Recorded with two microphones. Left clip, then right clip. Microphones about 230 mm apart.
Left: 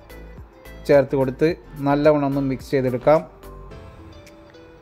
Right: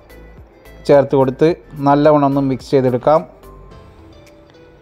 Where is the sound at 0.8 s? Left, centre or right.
Centre.